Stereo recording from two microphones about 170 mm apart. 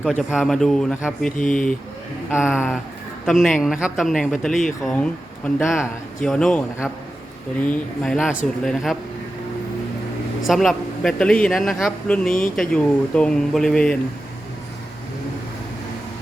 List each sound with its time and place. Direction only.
0.1 s a man's voice: 5° right (ahead or behind)
1.4 s speech: 50° left (ahead or behind)
2.3 s a man's voice: 5° right (ahead or behind)
7.6 s a man's voice: 5° left (ahead or behind)
10.4 s a man's voice: centre (ahead or behind)